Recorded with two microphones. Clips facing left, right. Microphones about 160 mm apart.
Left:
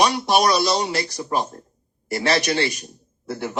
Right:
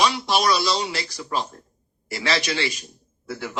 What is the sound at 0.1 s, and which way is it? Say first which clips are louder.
A man's voice: left 3 dB; 45° left (ahead or behind).